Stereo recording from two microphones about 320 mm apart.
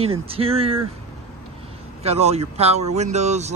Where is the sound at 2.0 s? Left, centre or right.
Centre.